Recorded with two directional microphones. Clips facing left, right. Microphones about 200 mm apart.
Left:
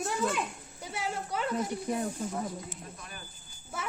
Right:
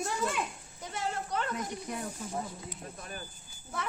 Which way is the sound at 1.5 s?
30° left (ahead or behind).